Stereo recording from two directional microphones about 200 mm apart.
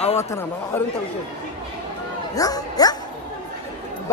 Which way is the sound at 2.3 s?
20° left (ahead or behind).